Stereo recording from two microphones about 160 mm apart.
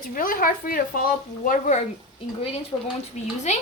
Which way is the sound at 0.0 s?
60° left (ahead or behind).